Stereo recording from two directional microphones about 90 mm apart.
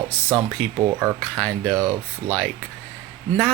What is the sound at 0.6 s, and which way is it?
Speech, 10° left (ahead or behind).